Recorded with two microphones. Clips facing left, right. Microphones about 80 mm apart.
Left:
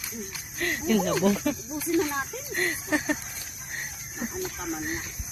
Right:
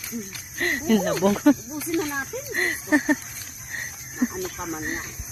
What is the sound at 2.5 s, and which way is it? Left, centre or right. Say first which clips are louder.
Speech: right 6 dB; right.